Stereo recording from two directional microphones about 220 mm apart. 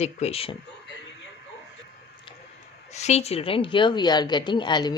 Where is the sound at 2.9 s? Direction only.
30° left (ahead or behind).